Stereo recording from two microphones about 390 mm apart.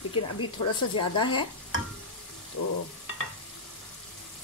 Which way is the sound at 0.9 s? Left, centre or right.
Centre.